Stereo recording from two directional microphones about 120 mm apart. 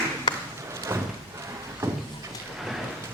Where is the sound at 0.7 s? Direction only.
25° right (ahead or behind).